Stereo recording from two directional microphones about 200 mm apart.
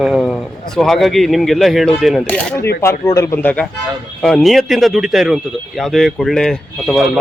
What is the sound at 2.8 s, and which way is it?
Speech, 15° left (ahead or behind).